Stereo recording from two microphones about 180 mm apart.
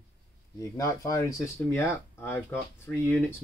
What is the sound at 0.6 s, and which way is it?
Speech, 15° left (ahead or behind).